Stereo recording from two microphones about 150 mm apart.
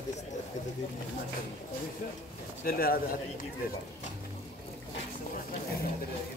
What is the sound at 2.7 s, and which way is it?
Speech, 85° left.